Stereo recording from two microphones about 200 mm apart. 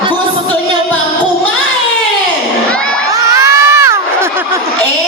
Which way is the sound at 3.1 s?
15° right (ahead or behind).